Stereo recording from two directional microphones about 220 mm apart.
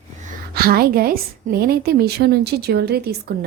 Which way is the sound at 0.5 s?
45° right (ahead or behind).